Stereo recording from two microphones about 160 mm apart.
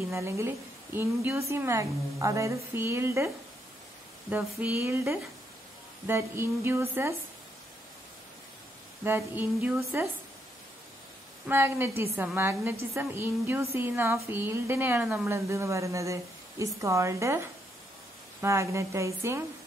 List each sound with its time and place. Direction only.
0.1 s speech: 15° right (ahead or behind)
4.3 s speech: 10° right (ahead or behind)
9.0 s speech: 15° right (ahead or behind)
11.4 s speech: 15° right (ahead or behind)